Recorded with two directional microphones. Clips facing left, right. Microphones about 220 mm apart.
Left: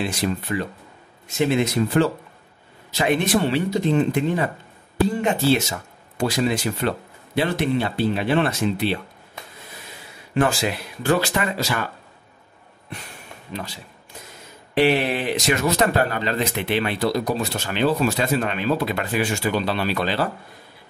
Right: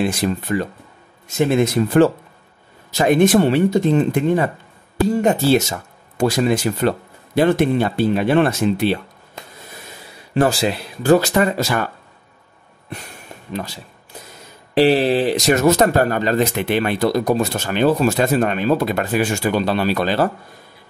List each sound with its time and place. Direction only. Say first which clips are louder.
0.0 s speech: right 4 dB; 45° right (ahead or behind)
4.9 s speech: right 4 dB; 40° right (ahead or behind)
10.3 s speech: right 4 dB; 35° right (ahead or behind)
14.7 s speech: right 5 dB; 35° right (ahead or behind)